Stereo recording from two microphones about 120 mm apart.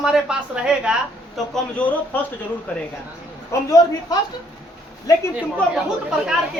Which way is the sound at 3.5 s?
30° left (ahead or behind).